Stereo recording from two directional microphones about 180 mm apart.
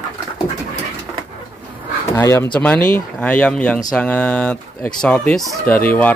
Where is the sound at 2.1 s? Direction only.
15° left (ahead or behind).